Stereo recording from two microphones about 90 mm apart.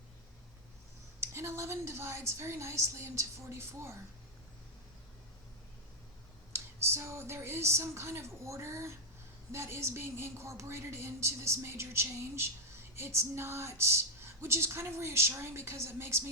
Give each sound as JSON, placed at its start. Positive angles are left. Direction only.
{"t": 1.2, "sound": "a woman's voice", "side_deg": -30}
{"t": 6.5, "sound": "speech", "side_deg": -30}